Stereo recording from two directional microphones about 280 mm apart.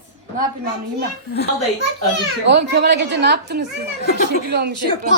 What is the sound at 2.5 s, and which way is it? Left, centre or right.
A woman's voice, right.